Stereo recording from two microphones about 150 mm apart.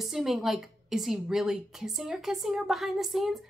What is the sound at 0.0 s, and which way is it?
A woman's voice, centre (ahead or behind).